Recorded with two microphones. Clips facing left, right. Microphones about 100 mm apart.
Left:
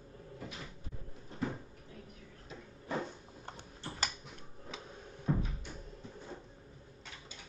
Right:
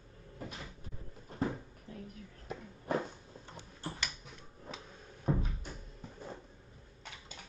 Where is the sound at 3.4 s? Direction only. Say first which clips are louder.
Right 2 dB; 50° left (ahead or behind).